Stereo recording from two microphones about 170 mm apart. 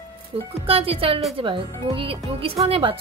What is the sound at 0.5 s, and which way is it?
A woman's voice, 35° right (ahead or behind).